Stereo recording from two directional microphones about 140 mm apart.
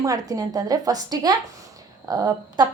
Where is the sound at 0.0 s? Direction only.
25° right (ahead or behind).